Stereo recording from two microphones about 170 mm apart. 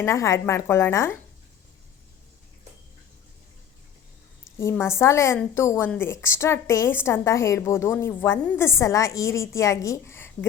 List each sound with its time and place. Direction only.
0.0 s a woman's voice: 20° left (ahead or behind)
4.7 s a woman's voice: 15° left (ahead or behind)